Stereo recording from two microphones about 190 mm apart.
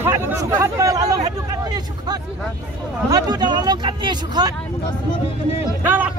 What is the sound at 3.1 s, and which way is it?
Speech, 20° right (ahead or behind).